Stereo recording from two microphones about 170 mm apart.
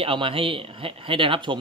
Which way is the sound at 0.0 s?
30° right (ahead or behind).